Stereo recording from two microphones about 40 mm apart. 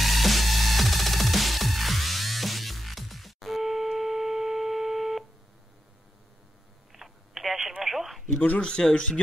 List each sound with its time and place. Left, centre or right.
0.0 s music: centre
6.9 s telephone: centre
8.5 s speech: left